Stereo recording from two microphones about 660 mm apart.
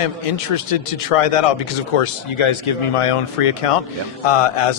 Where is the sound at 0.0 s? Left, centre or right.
Left.